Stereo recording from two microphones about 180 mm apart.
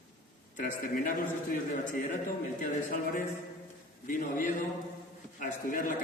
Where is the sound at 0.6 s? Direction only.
45° left (ahead or behind).